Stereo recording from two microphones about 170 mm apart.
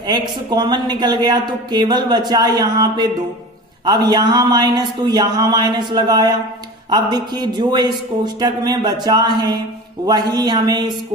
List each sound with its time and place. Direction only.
0.0 s speech: 25° right (ahead or behind)